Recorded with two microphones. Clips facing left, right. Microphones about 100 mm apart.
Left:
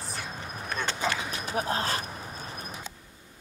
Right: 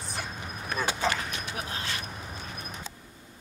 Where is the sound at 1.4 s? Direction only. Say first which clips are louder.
Left 7 dB; 35° left (ahead or behind).